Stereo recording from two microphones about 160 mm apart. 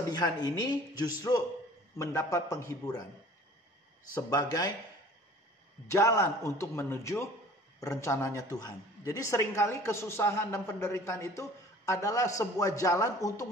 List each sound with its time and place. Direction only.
0.1 s speech: 25° left (ahead or behind)
4.1 s speech: 25° left (ahead or behind)
5.9 s speech: 20° left (ahead or behind)